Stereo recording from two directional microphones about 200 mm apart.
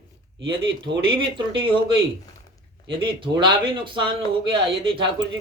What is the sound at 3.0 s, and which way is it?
Speech, 25° right (ahead or behind).